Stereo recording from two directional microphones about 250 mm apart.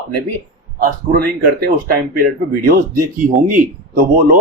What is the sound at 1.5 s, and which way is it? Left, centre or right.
Speech, right.